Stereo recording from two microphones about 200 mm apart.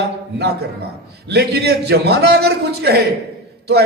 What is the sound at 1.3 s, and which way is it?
A man's voice, 50° right (ahead or behind).